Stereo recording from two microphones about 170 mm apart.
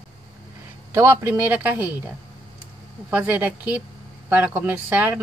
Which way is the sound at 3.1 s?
10° right (ahead or behind).